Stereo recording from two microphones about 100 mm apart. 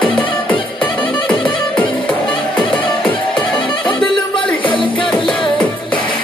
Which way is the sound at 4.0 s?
60° left (ahead or behind).